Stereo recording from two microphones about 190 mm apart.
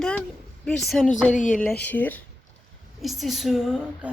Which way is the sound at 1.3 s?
40° left (ahead or behind).